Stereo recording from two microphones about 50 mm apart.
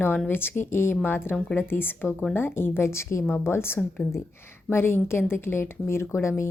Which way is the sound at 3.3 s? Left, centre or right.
Left.